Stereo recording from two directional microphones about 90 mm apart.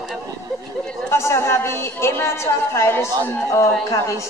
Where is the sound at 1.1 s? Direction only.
30° left (ahead or behind).